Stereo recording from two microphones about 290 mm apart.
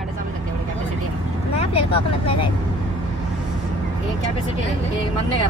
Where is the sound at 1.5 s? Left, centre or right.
Centre.